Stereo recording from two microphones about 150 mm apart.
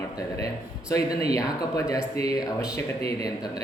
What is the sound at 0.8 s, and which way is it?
Speech, 25° left (ahead or behind).